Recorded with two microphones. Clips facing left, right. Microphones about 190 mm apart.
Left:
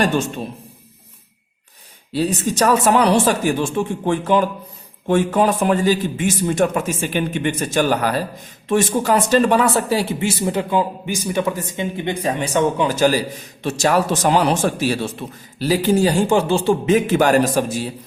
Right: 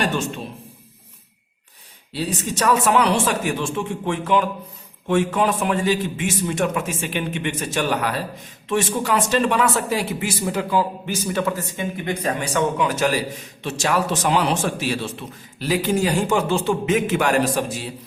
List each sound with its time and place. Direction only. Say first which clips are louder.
2.1 s speech: left 6 dB; 40° left (ahead or behind)
15.5 s speech: left 4 dB; 35° left (ahead or behind)